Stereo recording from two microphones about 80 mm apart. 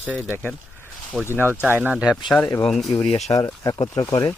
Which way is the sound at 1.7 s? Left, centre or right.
Right.